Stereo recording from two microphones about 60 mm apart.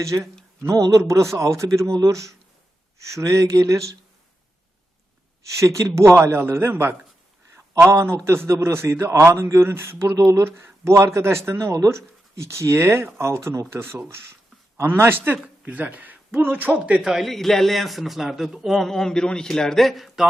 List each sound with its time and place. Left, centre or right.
0.1 s a man's voice: right
0.7 s a man's voice: right
5.4 s a man's voice: right
6.3 s a man's voice: right
11.7 s a man's voice: right
14.8 s a man's voice: right
15.6 s a man's voice: right
16.7 s a man's voice: centre
17.0 s a man's voice: centre